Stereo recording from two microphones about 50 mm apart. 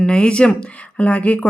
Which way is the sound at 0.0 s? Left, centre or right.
Left.